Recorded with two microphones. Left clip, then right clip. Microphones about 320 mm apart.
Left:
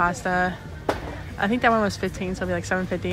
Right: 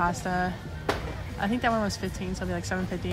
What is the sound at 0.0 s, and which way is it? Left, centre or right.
A woman's voice, centre.